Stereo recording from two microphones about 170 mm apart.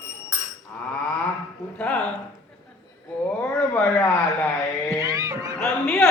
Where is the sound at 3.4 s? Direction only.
10° left (ahead or behind).